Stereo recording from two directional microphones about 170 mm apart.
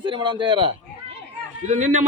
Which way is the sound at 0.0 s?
30° right (ahead or behind).